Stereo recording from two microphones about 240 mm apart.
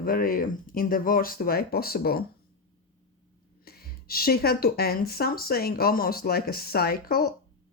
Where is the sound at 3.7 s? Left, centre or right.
Left.